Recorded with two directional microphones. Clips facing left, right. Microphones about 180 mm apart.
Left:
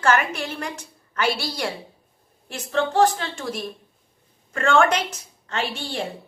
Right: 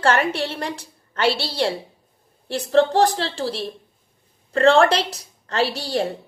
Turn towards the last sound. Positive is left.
turn(degrees=-40)  # may be behind; listen again after turning